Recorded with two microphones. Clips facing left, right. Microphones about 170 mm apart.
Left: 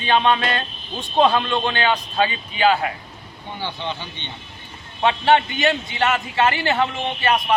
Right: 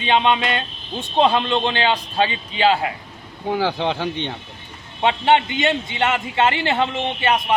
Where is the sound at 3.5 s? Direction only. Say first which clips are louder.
Right 8 dB; 90° right.